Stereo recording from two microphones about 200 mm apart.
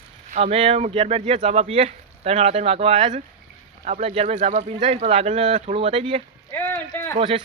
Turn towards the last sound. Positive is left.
turn(degrees=-25)  # may be behind; listen again after turning